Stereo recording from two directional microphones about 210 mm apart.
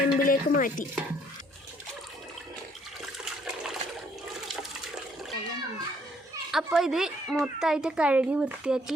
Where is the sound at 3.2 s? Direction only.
Centre (ahead or behind).